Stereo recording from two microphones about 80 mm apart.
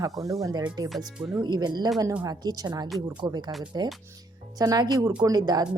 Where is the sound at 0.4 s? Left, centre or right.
Right.